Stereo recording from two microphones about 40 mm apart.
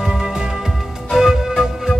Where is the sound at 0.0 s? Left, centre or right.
Centre.